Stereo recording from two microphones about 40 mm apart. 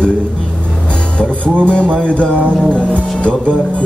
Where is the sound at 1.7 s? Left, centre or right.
Left.